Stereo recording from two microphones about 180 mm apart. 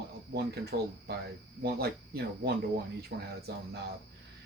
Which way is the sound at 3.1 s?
65° right (ahead or behind).